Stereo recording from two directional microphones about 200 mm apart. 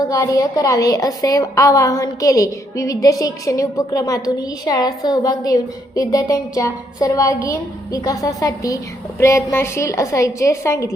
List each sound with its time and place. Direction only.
0.1 s a woman's voice: 15° left (ahead or behind)